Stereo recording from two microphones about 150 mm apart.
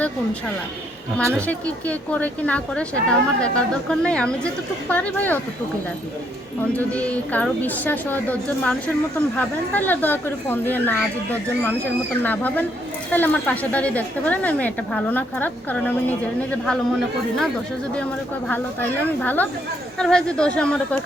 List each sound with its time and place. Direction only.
1.2 s speech: 20° right (ahead or behind)
1.5 s a woman's voice: 10° left (ahead or behind)
6.7 s a woman's voice: 10° left (ahead or behind)
12.2 s a woman's voice: 10° left (ahead or behind)
18.4 s a woman's voice: 10° left (ahead or behind)